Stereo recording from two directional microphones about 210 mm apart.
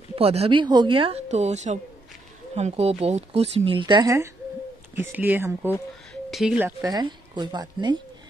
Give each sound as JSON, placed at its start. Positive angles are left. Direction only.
{"t": 0.1, "sound": "speech", "side_deg": -25}
{"t": 6.8, "sound": "speech", "side_deg": -20}